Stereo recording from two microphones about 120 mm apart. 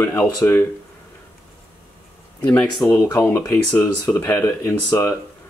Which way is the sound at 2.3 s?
10° left (ahead or behind).